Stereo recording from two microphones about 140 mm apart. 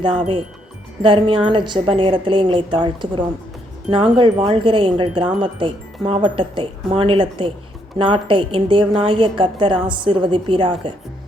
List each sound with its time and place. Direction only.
1.0 s speech: 35° right (ahead or behind)